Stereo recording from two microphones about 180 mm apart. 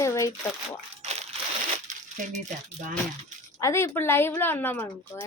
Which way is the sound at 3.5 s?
15° left (ahead or behind).